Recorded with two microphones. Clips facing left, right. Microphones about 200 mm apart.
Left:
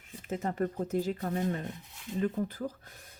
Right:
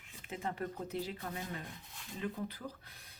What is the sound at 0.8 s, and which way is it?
Speech, 45° left (ahead or behind).